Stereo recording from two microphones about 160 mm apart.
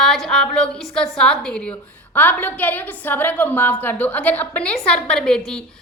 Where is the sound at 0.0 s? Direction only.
Centre (ahead or behind).